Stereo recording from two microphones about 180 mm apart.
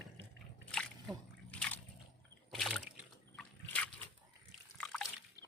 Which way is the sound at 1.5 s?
5° left (ahead or behind).